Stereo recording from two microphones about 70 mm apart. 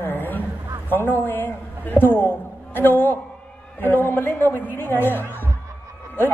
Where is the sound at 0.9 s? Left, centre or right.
Left.